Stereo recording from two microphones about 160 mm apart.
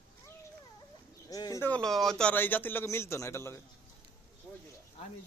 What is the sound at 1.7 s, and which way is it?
A man's voice, 5° left (ahead or behind).